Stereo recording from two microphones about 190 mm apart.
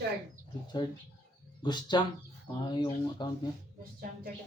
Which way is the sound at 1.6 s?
25° left (ahead or behind).